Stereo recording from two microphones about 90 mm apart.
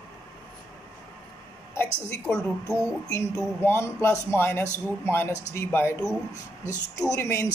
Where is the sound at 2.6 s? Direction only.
30° left (ahead or behind).